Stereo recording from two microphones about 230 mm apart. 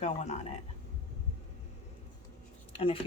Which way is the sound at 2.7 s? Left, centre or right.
Left.